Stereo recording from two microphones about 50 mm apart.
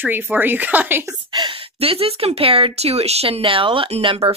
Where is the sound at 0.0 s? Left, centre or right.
Right.